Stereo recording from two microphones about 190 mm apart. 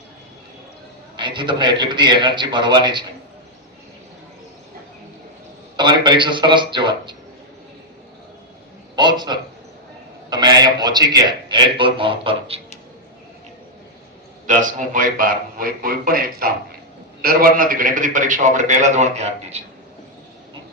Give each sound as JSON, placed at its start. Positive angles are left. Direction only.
{"t": 1.1, "sound": "a man's voice", "side_deg": -25}
{"t": 5.7, "sound": "a man's voice", "side_deg": -25}
{"t": 9.0, "sound": "a man's voice", "side_deg": -25}
{"t": 14.4, "sound": "a man's voice", "side_deg": -45}